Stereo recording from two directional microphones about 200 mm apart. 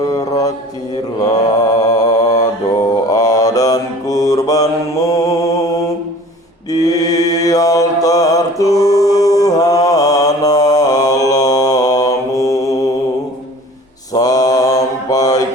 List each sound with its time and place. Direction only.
0.0 s mantra: 15° left (ahead or behind)
1.8 s mantra: 20° left (ahead or behind)
14.1 s mantra: 20° left (ahead or behind)